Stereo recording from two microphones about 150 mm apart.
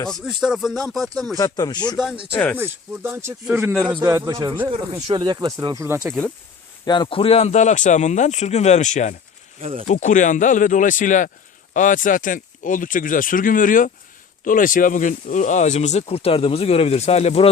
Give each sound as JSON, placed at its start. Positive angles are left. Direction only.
{"t": 0.1, "sound": "speech", "side_deg": 0}
{"t": 1.4, "sound": "speech", "side_deg": 25}
{"t": 2.3, "sound": "speech", "side_deg": 10}
{"t": 2.6, "sound": "speech", "side_deg": -15}
{"t": 4.3, "sound": "speech", "side_deg": -30}
{"t": 6.8, "sound": "speech", "side_deg": 30}